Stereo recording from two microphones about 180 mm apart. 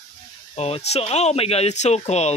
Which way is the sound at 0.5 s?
35° left (ahead or behind).